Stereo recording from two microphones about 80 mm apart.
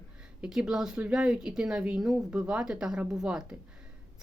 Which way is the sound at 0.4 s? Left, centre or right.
Centre.